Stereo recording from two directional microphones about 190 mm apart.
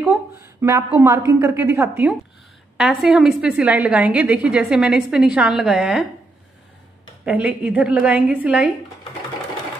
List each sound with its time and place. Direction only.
0.1 s a woman's voice: 15° right (ahead or behind)
7.2 s a woman's voice: 10° right (ahead or behind)